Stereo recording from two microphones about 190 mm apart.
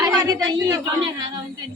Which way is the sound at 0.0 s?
20° right (ahead or behind).